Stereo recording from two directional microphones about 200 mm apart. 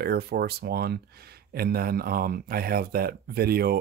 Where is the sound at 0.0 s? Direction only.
50° right (ahead or behind).